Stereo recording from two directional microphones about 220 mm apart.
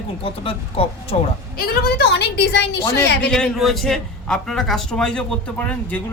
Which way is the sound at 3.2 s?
5° left (ahead or behind).